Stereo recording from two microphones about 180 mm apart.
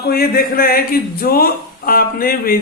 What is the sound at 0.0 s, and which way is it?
A man's voice, 55° left (ahead or behind).